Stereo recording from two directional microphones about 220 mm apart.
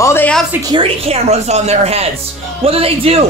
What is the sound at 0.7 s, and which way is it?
Speech, 25° right (ahead or behind).